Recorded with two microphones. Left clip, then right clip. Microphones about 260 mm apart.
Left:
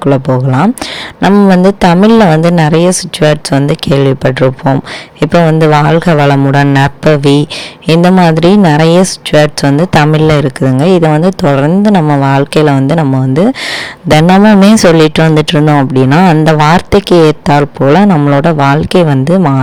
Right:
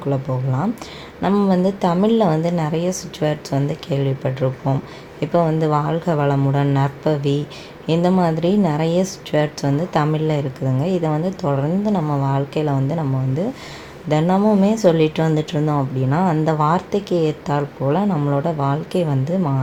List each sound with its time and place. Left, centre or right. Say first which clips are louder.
0.0 s speech: left 14 dB; left